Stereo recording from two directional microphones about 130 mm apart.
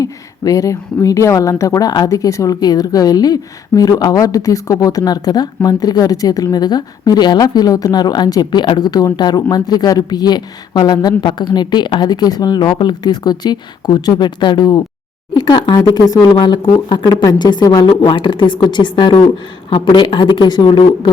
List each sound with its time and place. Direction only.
0.0 s a woman's voice: 25° left (ahead or behind)